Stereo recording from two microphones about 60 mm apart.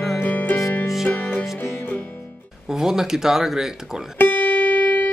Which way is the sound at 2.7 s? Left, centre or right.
Centre.